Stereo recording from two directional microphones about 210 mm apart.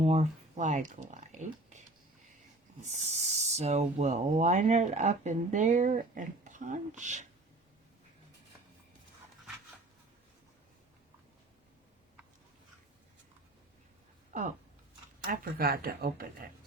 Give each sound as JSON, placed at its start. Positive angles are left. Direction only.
{"t": 0.0, "sound": "speech", "side_deg": -30}
{"t": 2.9, "sound": "speech", "side_deg": -30}
{"t": 14.3, "sound": "speech", "side_deg": -35}